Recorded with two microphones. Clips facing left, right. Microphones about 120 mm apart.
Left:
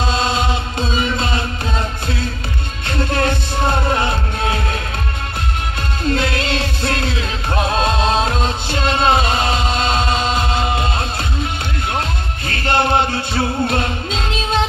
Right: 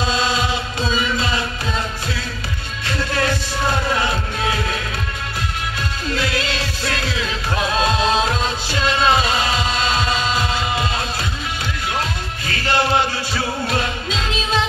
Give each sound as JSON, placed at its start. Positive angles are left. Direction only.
{"t": 0.1, "sound": "chant", "side_deg": 55}
{"t": 2.9, "sound": "music", "side_deg": 50}
{"t": 6.0, "sound": "music", "side_deg": 50}
{"t": 12.4, "sound": "music", "side_deg": 50}